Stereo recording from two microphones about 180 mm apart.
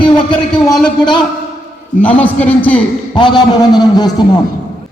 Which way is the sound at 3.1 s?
25° left (ahead or behind).